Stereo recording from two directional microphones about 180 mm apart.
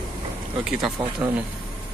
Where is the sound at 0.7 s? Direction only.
Centre (ahead or behind).